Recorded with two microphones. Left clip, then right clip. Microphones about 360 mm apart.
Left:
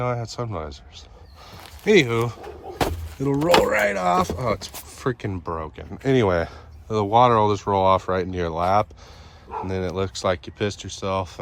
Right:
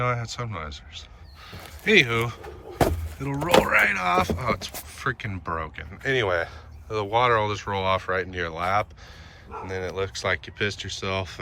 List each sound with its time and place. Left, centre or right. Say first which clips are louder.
0.0 s speech: left 1 dB; centre